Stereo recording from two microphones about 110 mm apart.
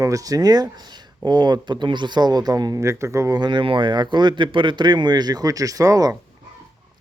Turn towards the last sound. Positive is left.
turn(degrees=-35)  # may be behind; listen again after turning